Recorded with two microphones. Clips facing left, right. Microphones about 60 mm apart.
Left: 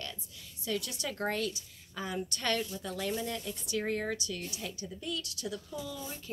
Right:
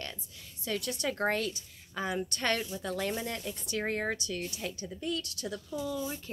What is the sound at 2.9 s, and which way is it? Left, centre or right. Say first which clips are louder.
A woman's voice: right 3 dB; right.